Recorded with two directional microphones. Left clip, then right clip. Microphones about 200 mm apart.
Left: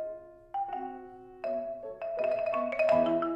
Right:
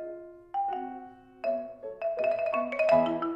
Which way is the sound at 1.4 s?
20° right (ahead or behind).